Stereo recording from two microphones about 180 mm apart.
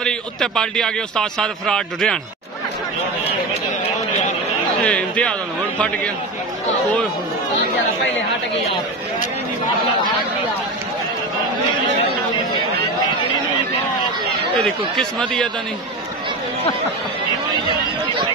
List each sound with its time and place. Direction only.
0.0 s speech: 5° left (ahead or behind)
4.8 s a man's voice: 5° left (ahead or behind)
15.0 s speech: 5° left (ahead or behind)